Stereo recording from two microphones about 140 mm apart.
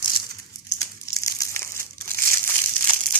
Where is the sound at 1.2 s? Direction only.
25° left (ahead or behind).